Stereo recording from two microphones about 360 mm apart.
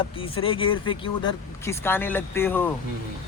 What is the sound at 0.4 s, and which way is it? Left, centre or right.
Speech, centre.